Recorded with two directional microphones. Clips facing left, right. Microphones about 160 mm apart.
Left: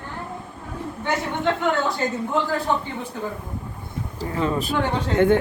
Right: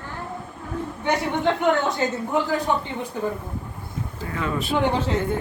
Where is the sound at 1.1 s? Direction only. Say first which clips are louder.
Right 1 dB; 20° right (ahead or behind).